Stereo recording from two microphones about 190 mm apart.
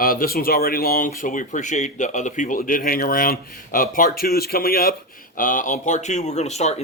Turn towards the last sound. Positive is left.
turn(degrees=35)  # may be behind; listen again after turning